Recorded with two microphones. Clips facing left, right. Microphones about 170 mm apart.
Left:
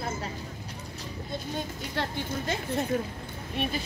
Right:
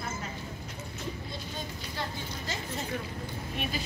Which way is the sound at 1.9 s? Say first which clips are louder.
Left 7 dB; 60° left (ahead or behind).